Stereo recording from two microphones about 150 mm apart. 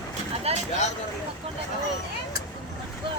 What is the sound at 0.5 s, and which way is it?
Speech, 45° right (ahead or behind).